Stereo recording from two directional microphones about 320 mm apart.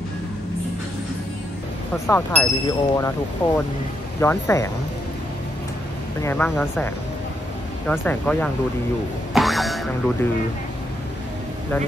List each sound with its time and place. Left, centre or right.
2.0 s speech: centre
6.2 s speech: centre
9.3 s boing: centre